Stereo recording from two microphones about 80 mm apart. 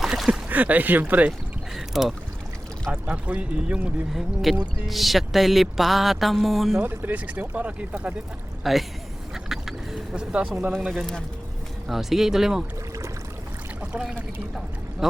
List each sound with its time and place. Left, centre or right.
0.0 s a sound: centre
0.4 s speech: right
1.7 s speech: centre
2.9 s speech: centre
4.5 s music: centre
6.8 s speech: right
8.7 s music: centre
9.3 s duck: centre
10.8 s music: centre
13.9 s speech: centre